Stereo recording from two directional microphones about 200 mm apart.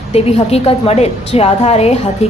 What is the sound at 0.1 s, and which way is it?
A woman's voice, 30° left (ahead or behind).